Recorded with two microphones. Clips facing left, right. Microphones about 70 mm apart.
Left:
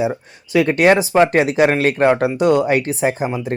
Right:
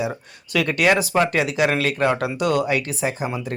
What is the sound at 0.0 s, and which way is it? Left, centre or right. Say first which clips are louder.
Speech: left 6 dB; left.